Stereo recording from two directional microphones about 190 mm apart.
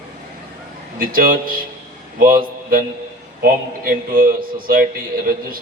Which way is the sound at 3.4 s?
50° right (ahead or behind).